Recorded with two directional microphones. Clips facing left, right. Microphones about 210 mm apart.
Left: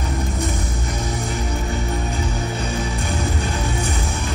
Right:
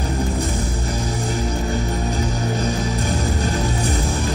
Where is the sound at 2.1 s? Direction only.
40° right (ahead or behind).